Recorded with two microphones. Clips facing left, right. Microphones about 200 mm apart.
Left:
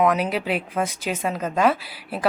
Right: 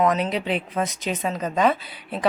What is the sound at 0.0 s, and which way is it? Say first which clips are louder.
Speech: left 1 dB; 5° left (ahead or behind).